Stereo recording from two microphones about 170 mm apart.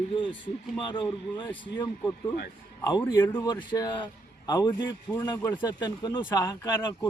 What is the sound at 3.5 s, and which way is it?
Speech, 25° left (ahead or behind).